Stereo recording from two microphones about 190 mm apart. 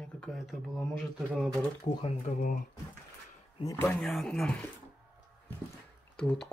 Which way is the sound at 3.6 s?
15° left (ahead or behind).